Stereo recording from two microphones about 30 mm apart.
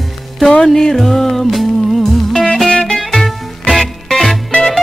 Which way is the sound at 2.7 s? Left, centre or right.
Centre.